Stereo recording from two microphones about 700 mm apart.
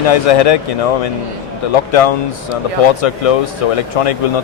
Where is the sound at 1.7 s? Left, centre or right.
Left.